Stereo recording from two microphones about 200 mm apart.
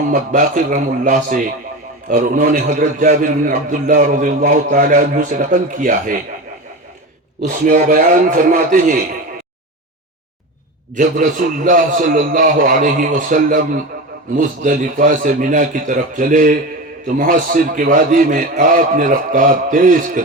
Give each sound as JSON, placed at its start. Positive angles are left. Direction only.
{"t": 0.3, "sound": "a man's voice", "side_deg": -40}
{"t": 7.4, "sound": "a man's voice", "side_deg": -40}
{"t": 10.9, "sound": "a man's voice", "side_deg": -40}